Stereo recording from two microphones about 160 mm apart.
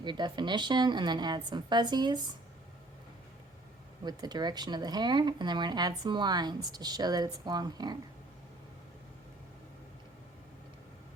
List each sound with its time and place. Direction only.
0.0 s speech: 30° right (ahead or behind)
4.0 s speech: 25° right (ahead or behind)